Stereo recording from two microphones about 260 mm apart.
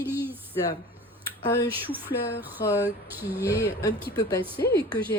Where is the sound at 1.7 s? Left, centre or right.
Centre.